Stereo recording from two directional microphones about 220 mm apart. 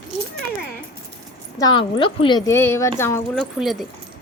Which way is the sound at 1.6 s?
20° left (ahead or behind).